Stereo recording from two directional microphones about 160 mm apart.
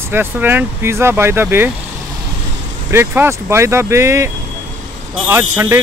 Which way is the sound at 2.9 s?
15° right (ahead or behind).